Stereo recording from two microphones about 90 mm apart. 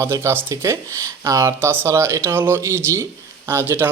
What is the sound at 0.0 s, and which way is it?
A man's voice, 30° right (ahead or behind).